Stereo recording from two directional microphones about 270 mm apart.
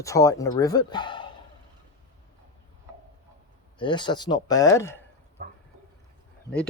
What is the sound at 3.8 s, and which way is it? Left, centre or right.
Speech, centre.